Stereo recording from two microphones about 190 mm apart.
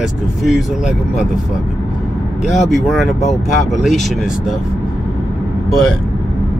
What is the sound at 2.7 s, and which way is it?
Speech, centre (ahead or behind).